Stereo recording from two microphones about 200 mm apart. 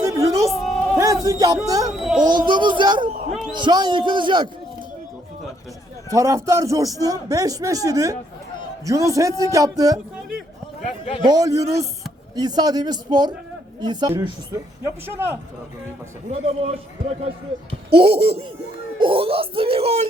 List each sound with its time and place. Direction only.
0.0 s music: 15° right (ahead or behind)
0.5 s music: centre (ahead or behind)
0.9 s music: 15° right (ahead or behind)
1.6 s a man's voice: 20° right (ahead or behind)
1.9 s a child's voice: 5° right (ahead or behind)
2.5 s speech: 25° right (ahead or behind)
3.1 s speech: 45° right (ahead or behind)
3.5 s speech: 20° right (ahead or behind)
6.1 s a man's voice: 15° right (ahead or behind)
10.8 s a sound: 35° left (ahead or behind)
11.3 s speech: 20° right (ahead or behind)
16.3 s a man's voice: 30° right (ahead or behind)